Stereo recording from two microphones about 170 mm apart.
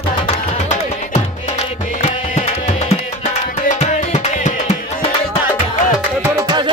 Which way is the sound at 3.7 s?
45° left (ahead or behind).